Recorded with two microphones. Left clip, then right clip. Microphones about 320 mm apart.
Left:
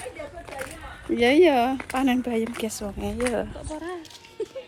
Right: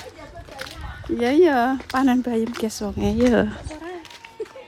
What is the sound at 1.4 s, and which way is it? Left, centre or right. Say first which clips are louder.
Speech: right 1 dB; right.